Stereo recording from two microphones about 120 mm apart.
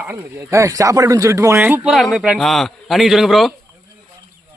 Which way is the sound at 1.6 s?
15° right (ahead or behind).